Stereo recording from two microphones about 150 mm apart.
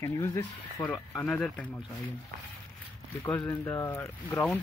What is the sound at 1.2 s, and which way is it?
Speech, 5° left (ahead or behind).